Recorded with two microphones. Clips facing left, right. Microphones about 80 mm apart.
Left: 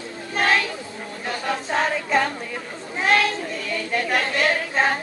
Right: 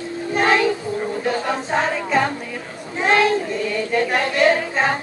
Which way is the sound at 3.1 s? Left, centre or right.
Right.